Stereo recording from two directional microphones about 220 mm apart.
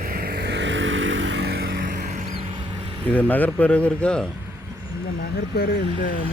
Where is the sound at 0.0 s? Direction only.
45° right (ahead or behind).